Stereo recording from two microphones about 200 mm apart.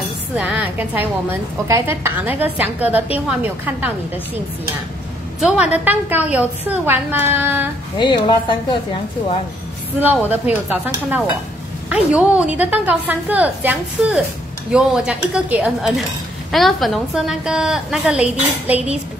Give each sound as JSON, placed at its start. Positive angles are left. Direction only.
{"t": 0.4, "sound": "a woman's voice", "side_deg": -5}
{"t": 5.4, "sound": "a woman's voice", "side_deg": -5}
{"t": 8.0, "sound": "a woman's voice", "side_deg": 25}
{"t": 9.9, "sound": "a woman's voice", "side_deg": -10}